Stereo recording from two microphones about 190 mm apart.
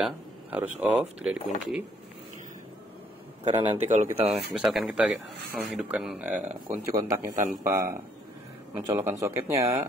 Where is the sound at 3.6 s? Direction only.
30° right (ahead or behind).